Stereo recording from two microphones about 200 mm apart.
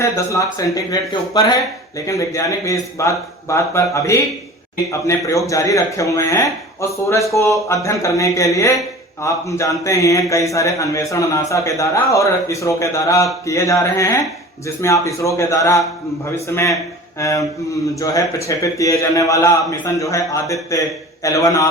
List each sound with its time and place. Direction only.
0.0 s a man's voice: 15° left (ahead or behind)